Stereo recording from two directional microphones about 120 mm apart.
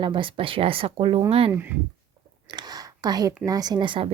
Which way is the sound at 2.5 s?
35° right (ahead or behind).